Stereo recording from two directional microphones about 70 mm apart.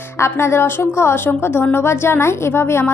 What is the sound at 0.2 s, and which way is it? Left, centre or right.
A woman's voice, left.